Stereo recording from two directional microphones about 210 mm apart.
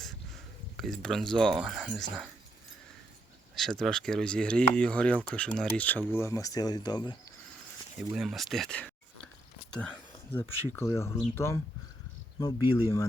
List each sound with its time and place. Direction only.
0.8 s speech: centre (ahead or behind)
3.5 s speech: centre (ahead or behind); by 7.2 s 20° left (ahead or behind)
7.9 s speech: centre (ahead or behind)
9.7 s a sound: 5° left (ahead or behind)
10.7 s speech: 10° left (ahead or behind)